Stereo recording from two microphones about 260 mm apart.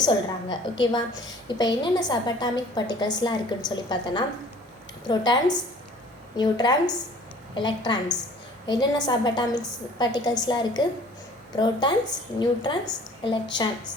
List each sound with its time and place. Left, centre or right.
0.5 s a woman's voice: centre